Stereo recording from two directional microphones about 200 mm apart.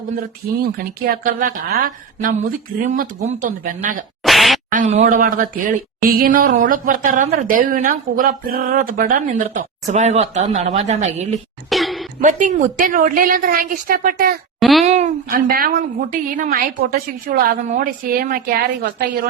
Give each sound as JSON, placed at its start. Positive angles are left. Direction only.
{"t": 0.6, "sound": "speech", "side_deg": -45}
{"t": 4.2, "sound": "a sound", "side_deg": 0}
{"t": 4.7, "sound": "speech", "side_deg": -35}
{"t": 11.7, "sound": "a sound", "side_deg": 0}
{"t": 12.2, "sound": "speech", "side_deg": -40}
{"t": 14.6, "sound": "a child's voice", "side_deg": 0}
{"t": 14.8, "sound": "speech", "side_deg": -35}